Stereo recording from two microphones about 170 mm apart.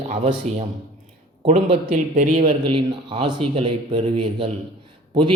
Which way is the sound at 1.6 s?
45° right (ahead or behind).